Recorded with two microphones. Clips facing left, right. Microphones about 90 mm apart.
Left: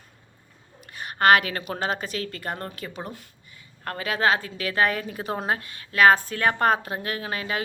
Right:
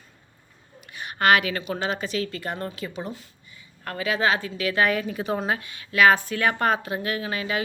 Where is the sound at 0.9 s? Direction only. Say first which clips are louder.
Left 2 dB; 40° left (ahead or behind).